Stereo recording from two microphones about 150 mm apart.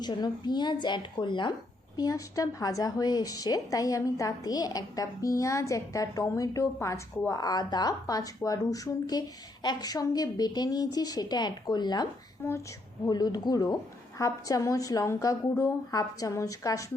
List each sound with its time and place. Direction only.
0.0 s a woman's voice: 30° left (ahead or behind)
12.4 s speech: 15° left (ahead or behind)
13.1 s a woman's voice: 25° left (ahead or behind)